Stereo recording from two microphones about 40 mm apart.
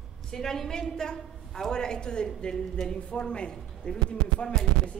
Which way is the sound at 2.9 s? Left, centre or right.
Left.